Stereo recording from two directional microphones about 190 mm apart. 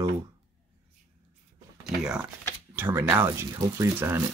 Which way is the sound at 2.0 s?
5° right (ahead or behind).